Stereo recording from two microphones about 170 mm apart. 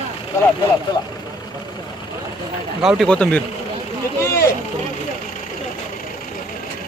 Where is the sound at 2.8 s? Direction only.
Centre (ahead or behind).